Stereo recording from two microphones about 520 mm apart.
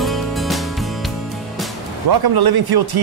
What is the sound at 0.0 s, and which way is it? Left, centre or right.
Music, centre.